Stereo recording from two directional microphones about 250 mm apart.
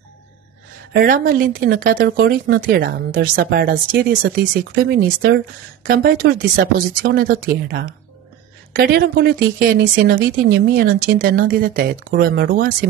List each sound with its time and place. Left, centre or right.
0.9 s speech: right